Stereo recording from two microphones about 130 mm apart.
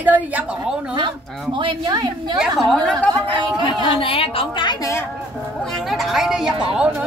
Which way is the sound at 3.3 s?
40° right (ahead or behind).